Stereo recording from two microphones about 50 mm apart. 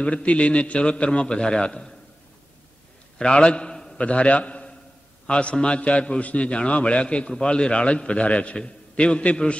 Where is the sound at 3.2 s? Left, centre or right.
Centre.